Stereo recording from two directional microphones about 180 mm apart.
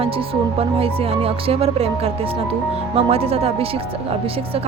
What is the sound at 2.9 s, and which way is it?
Speech, 35° right (ahead or behind).